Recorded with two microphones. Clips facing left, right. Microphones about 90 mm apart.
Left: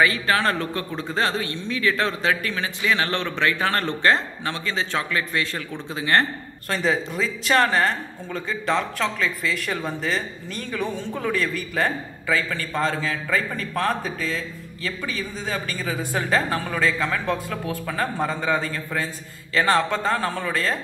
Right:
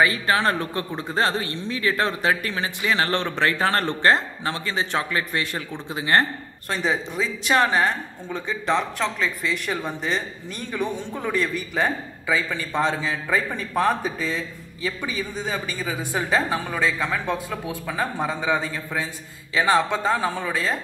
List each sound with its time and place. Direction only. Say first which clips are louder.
0.0 s a man's voice: even; 25° right (ahead or behind)
6.7 s a man's voice: left 1 dB; 5° right (ahead or behind)